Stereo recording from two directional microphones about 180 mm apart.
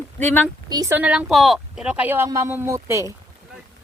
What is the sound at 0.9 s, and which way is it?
Speech, 5° right (ahead or behind).